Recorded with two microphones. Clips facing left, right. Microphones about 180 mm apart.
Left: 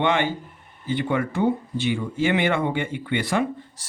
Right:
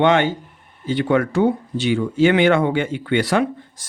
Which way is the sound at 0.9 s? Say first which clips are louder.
Right 6 dB; 85° right.